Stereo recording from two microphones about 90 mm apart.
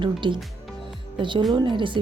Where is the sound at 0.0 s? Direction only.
65° right (ahead or behind).